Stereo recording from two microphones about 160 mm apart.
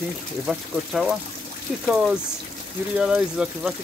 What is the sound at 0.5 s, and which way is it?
Speech, centre (ahead or behind).